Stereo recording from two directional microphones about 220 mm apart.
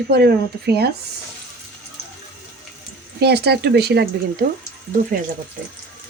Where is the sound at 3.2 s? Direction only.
50° right (ahead or behind).